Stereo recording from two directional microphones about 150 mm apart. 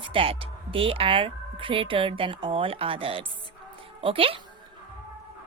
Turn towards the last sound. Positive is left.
turn(degrees=-40)  # may be behind; listen again after turning